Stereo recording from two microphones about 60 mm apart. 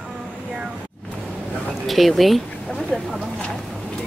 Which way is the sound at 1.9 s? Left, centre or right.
Centre.